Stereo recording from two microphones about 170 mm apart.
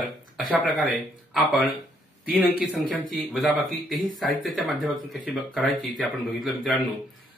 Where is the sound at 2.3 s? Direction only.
5° right (ahead or behind).